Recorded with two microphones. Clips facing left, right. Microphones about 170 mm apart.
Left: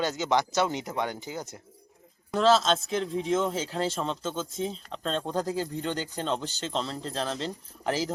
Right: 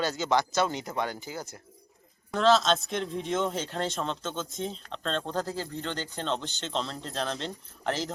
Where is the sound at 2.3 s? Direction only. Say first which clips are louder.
Left 1 dB; 5° left (ahead or behind).